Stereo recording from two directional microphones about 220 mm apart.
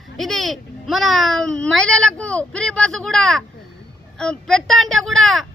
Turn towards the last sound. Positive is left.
turn(degrees=0)  # may be behind; listen again after turning